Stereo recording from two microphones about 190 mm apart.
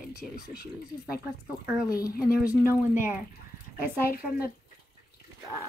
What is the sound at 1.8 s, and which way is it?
Speech, 20° left (ahead or behind).